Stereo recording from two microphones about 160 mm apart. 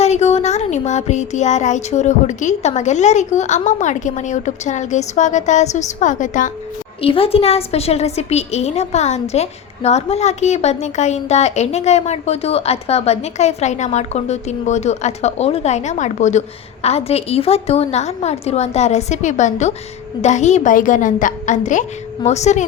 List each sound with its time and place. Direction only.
0.0 s a woman's voice: 45° left (ahead or behind)
7.0 s a woman's voice: 35° left (ahead or behind)